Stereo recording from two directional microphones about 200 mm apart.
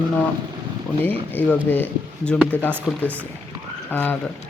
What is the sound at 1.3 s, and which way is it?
Speech, 10° left (ahead or behind).